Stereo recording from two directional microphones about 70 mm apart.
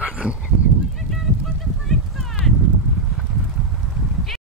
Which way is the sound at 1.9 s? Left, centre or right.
Centre.